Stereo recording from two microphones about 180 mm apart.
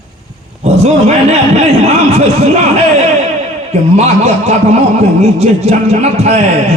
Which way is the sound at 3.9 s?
40° right (ahead or behind).